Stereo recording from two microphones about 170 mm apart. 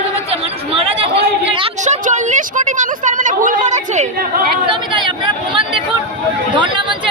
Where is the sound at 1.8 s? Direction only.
45° right (ahead or behind).